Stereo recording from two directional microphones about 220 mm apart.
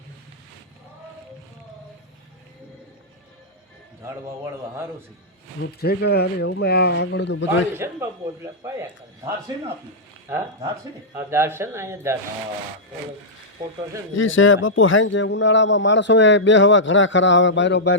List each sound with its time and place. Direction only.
4.0 s speech: 10° right (ahead or behind)
5.6 s speech: 45° left (ahead or behind)
7.8 s speech: 10° right (ahead or behind)
14.1 s a man's voice: 60° left (ahead or behind)